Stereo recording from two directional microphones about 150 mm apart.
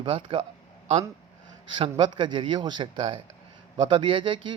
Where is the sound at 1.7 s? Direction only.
35° right (ahead or behind).